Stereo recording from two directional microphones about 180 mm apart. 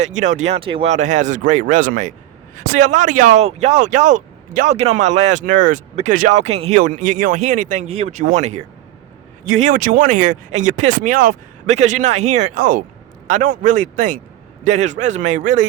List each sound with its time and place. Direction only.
0.0 s speech: 40° right (ahead or behind)